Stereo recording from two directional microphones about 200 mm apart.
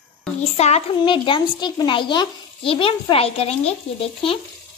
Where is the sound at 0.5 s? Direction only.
30° left (ahead or behind).